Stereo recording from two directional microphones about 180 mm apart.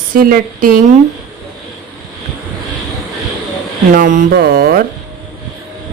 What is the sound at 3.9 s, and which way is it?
Speech, 50° right (ahead or behind).